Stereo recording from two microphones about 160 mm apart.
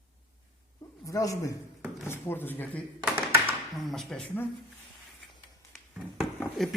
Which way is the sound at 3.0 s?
10° right (ahead or behind).